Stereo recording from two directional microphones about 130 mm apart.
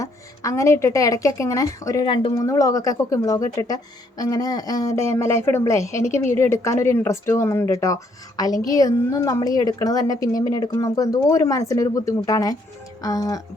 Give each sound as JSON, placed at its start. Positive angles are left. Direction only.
{"t": 0.0, "sound": "speech", "side_deg": 25}
{"t": 2.0, "sound": "speech", "side_deg": 40}
{"t": 2.3, "sound": "speech", "side_deg": 25}